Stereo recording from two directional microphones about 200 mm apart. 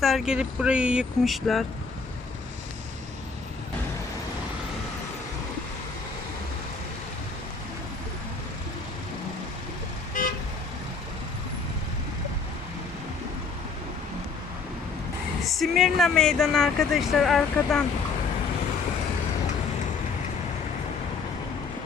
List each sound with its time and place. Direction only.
0.0 s speech: centre (ahead or behind)
10.2 s vehicle: 40° left (ahead or behind)
15.4 s speech: centre (ahead or behind)